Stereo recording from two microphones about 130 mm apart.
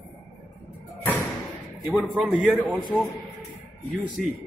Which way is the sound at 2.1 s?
10° right (ahead or behind).